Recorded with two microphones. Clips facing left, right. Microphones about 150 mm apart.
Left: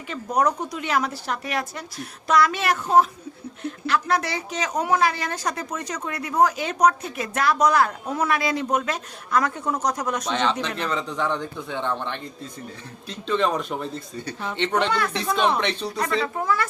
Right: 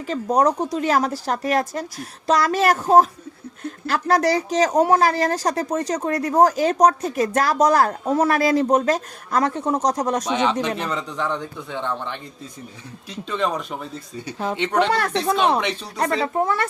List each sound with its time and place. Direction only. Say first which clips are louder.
0.1 s speech: right 4 dB; 40° right (ahead or behind)
10.2 s speech: right 3 dB; 10° right (ahead or behind)
14.8 s speech: right 4 dB; 40° right (ahead or behind)